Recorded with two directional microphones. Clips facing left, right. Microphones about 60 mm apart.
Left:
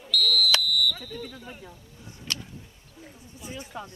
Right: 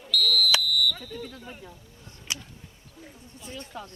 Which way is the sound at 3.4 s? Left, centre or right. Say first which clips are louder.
Left 1 dB; centre.